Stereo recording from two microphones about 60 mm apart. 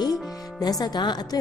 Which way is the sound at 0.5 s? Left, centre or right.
Left.